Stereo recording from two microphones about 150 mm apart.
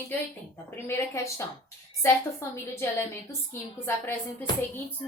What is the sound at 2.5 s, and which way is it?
A woman's voice, 15° left (ahead or behind).